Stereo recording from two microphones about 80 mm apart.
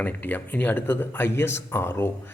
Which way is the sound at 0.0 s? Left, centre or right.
Left.